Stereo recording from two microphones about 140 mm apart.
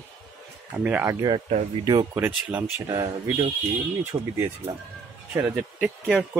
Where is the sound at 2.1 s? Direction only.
15° right (ahead or behind).